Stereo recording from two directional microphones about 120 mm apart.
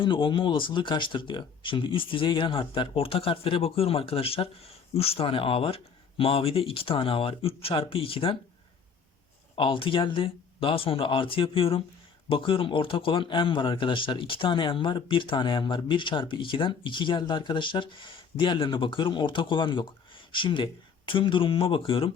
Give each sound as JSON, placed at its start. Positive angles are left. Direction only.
{"t": 0.0, "sound": "speech", "side_deg": 45}
{"t": 9.6, "sound": "speech", "side_deg": 45}